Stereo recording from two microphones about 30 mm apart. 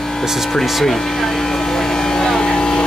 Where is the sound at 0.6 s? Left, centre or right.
Centre.